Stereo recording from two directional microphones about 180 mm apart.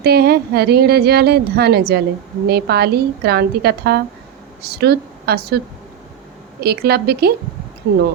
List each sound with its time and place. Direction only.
0.0 s speech: 60° right (ahead or behind)
6.6 s speech: 65° right (ahead or behind)